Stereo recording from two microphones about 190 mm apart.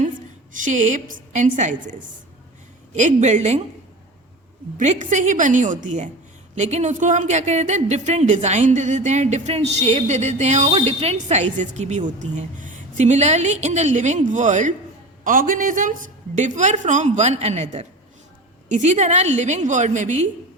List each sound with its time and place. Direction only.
0.5 s speech: 40° right (ahead or behind)
2.9 s speech: 40° right (ahead or behind)
4.8 s speech: 40° right (ahead or behind)